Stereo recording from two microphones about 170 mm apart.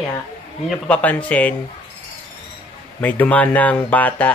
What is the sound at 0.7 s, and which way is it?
Speech, 5° left (ahead or behind).